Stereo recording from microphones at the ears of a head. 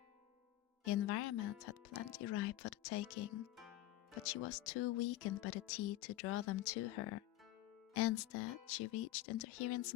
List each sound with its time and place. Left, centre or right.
0.9 s speech: left